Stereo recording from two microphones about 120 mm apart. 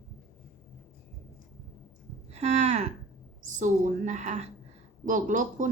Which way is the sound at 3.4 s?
90° right.